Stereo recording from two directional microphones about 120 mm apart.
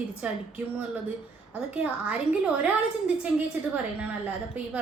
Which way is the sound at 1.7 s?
10° right (ahead or behind).